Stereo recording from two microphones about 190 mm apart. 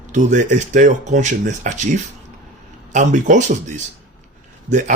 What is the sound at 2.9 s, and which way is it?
Speech, 40° right (ahead or behind).